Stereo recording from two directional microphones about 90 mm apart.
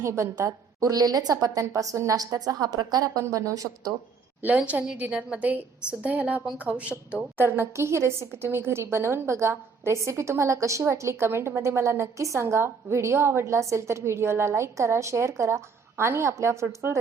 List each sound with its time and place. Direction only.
0.0 s a woman's voice: 35° right (ahead or behind)
4.4 s a woman's voice: 15° right (ahead or behind)
7.3 s a woman's voice: 25° right (ahead or behind)